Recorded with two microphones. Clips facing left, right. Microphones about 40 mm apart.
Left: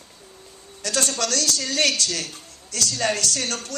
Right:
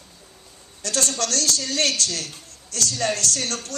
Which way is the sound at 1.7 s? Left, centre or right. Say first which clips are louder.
Left 4 dB; left.